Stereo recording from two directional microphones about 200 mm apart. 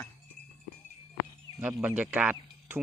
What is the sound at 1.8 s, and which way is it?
Speech, 10° right (ahead or behind).